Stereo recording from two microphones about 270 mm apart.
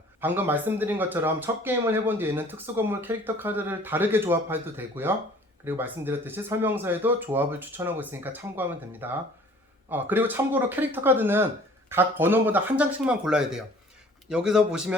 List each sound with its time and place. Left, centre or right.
0.2 s speech: centre